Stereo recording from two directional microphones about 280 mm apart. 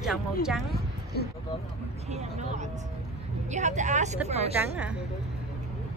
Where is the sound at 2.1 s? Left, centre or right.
Right.